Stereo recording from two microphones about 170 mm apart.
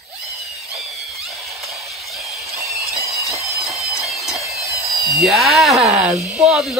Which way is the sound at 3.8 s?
Centre (ahead or behind).